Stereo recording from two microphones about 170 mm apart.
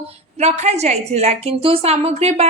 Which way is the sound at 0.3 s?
40° right (ahead or behind).